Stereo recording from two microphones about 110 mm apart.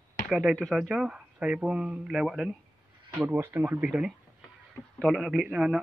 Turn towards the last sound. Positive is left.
turn(degrees=-5)  # may be behind; listen again after turning